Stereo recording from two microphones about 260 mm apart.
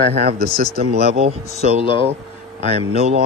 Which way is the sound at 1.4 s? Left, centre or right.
Left.